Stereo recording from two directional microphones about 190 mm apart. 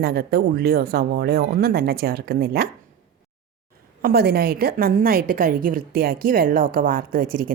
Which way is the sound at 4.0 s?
55° right (ahead or behind).